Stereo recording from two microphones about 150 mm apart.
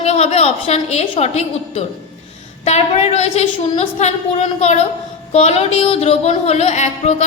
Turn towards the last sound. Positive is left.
turn(degrees=50)  # may be behind; listen again after turning